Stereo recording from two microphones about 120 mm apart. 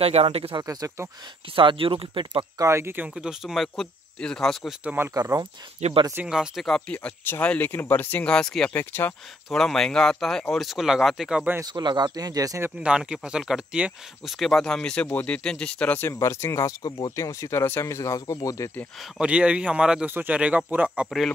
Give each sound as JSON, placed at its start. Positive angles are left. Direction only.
{"t": 0.0, "sound": "speech", "side_deg": -55}
{"t": 0.6, "sound": "speech", "side_deg": -30}
{"t": 1.5, "sound": "speech", "side_deg": -45}
{"t": 2.6, "sound": "speech", "side_deg": -20}
{"t": 4.8, "sound": "speech", "side_deg": -20}
{"t": 5.1, "sound": "speech", "side_deg": -30}
{"t": 5.8, "sound": "speech", "side_deg": -70}
{"t": 6.2, "sound": "speech", "side_deg": -5}
{"t": 8.7, "sound": "speech", "side_deg": 15}
{"t": 9.5, "sound": "speech", "side_deg": 5}
{"t": 11.6, "sound": "speech", "side_deg": -35}
{"t": 12.6, "sound": "speech", "side_deg": -10}
{"t": 14.4, "sound": "speech", "side_deg": 5}
{"t": 18.9, "sound": "speech", "side_deg": -10}